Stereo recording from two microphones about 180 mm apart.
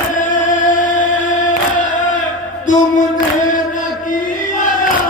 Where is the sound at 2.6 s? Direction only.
45° left (ahead or behind).